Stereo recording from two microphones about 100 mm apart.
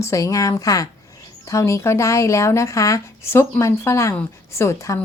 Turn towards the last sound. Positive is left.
turn(degrees=30)  # may be behind; listen again after turning